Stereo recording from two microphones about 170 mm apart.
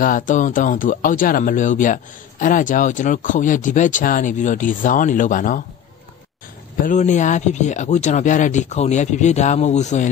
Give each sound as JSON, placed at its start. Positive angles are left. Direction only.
{"t": 0.0, "sound": "speech", "side_deg": 50}
{"t": 6.8, "sound": "speech", "side_deg": 45}